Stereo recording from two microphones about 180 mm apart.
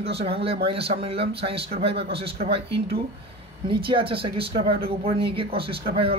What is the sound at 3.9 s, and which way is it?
Speech, 30° right (ahead or behind).